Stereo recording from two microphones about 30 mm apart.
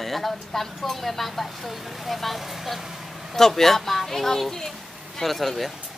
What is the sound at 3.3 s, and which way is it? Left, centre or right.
Speech, centre.